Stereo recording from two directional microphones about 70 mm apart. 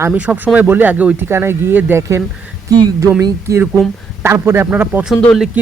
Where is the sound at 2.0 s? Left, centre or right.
Right.